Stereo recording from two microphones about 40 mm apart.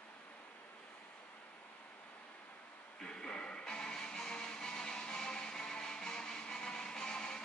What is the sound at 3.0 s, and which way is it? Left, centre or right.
Music, left.